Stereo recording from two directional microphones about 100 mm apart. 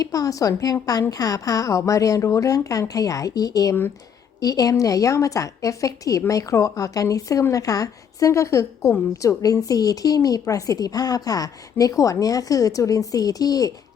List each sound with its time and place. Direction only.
0.0 s a woman's voice: 35° left (ahead or behind)